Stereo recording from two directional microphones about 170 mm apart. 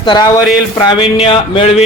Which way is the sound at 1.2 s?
30° left (ahead or behind).